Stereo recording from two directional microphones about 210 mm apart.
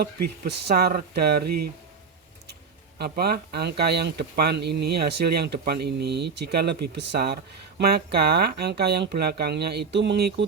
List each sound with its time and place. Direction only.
0.7 s speech: 45° right (ahead or behind)
3.0 s speech: 50° right (ahead or behind)